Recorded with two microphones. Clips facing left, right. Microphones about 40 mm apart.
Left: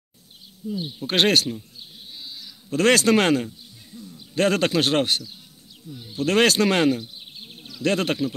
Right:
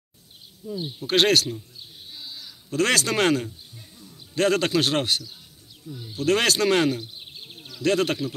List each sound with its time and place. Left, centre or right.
0.7 s speech: centre
1.0 s a man's voice: left
2.7 s a man's voice: left
3.9 s a sound: right
4.4 s a man's voice: left
5.9 s speech: centre
6.1 s speech: left